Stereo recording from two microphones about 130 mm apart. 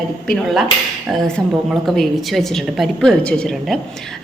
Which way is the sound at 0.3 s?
Centre (ahead or behind).